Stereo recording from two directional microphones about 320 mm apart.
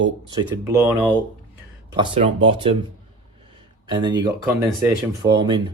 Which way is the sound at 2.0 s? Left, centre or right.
Centre.